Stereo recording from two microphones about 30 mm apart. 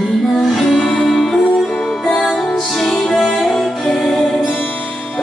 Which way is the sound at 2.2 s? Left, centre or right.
Centre.